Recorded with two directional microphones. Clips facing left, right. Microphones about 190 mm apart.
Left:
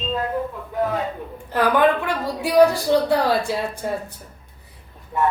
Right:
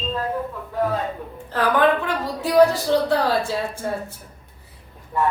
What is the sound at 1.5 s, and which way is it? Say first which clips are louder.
A woman's voice: left 1 dB; 15° left (ahead or behind).